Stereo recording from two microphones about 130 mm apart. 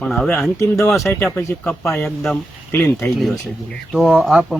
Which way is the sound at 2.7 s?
15° left (ahead or behind).